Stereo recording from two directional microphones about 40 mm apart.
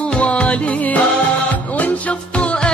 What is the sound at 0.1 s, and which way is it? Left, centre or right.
Music, left.